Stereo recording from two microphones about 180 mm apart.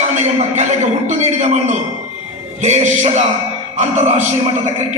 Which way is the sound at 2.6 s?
40° right (ahead or behind).